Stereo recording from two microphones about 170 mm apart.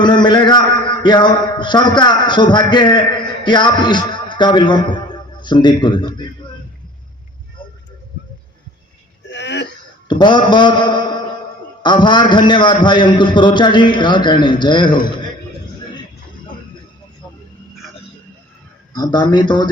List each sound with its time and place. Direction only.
0.0 s a man's voice: 25° left (ahead or behind)
9.2 s a sound: 90° left
10.1 s a man's voice: 25° left (ahead or behind)
18.9 s a man's voice: 25° left (ahead or behind)